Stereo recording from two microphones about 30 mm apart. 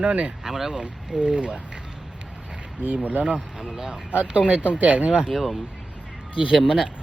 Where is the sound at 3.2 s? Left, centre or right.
Centre.